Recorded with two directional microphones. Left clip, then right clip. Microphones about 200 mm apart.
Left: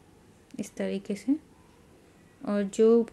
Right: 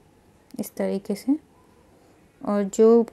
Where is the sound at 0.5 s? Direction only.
20° right (ahead or behind).